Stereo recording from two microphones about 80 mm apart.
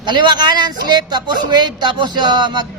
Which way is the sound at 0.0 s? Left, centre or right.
Right.